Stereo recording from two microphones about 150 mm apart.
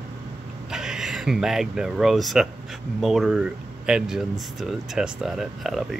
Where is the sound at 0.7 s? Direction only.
5° right (ahead or behind).